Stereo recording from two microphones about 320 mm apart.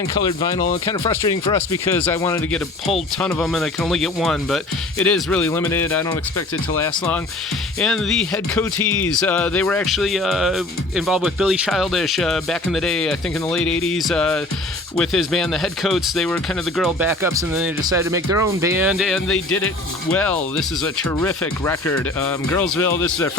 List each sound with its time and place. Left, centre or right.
0.3 s speech: centre